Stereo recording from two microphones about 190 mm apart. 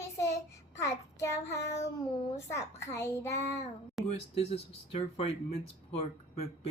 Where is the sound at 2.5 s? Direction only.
15° left (ahead or behind).